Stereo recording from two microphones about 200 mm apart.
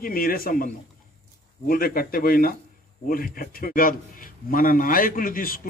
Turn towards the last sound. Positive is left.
turn(degrees=45)  # may be behind; listen again after turning